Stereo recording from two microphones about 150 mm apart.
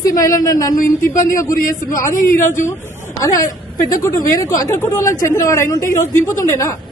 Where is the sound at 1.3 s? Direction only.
20° left (ahead or behind).